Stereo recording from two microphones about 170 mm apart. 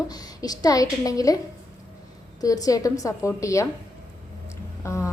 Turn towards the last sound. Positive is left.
turn(degrees=15)  # may be behind; listen again after turning